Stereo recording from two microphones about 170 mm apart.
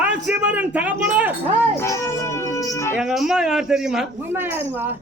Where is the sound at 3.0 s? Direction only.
5° right (ahead or behind).